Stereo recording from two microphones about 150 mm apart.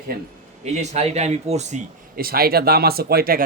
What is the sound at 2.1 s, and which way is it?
Speech, 85° right.